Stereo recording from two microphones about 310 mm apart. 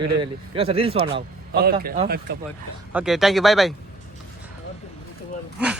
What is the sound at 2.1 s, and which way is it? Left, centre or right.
Speech, right.